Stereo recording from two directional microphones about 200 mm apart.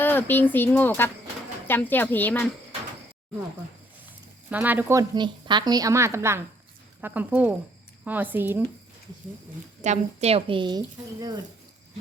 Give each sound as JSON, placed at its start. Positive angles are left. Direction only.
{"t": 0.0, "sound": "speech", "side_deg": 10}
{"t": 4.4, "sound": "a woman's voice", "side_deg": -10}
{"t": 9.8, "sound": "a woman's voice", "side_deg": -35}